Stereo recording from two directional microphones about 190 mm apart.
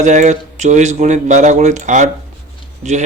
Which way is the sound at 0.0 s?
40° right (ahead or behind).